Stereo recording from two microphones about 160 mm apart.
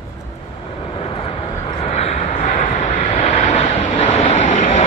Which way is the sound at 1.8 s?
40° left (ahead or behind).